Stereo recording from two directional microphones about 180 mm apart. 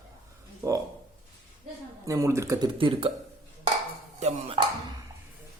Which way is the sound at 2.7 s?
30° right (ahead or behind).